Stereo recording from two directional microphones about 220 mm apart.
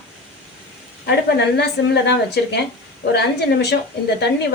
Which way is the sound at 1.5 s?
50° left (ahead or behind).